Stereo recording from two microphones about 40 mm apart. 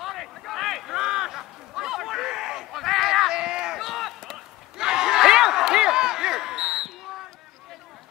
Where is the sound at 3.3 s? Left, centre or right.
Centre.